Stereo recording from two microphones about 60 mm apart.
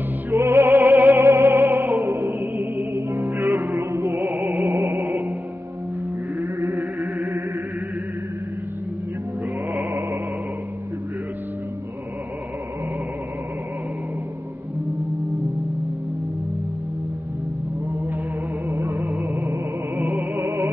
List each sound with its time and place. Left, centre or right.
0.3 s music: right
1.2 s music: right
2.5 s music: right
2.9 s music: right
6.8 s music: right
18.7 s music: right